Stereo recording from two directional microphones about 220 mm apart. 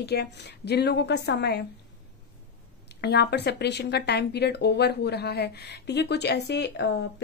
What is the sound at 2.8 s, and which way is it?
Speech, 50° left (ahead or behind).